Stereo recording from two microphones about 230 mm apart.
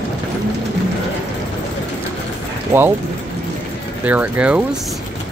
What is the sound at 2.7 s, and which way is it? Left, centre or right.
Speech, centre.